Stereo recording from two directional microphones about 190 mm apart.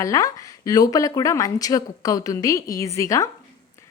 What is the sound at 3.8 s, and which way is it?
Music, 15° left (ahead or behind).